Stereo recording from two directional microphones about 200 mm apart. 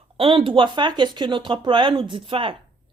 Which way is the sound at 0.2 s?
25° right (ahead or behind).